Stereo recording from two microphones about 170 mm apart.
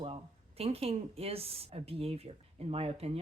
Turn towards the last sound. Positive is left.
turn(degrees=-35)  # may be behind; listen again after turning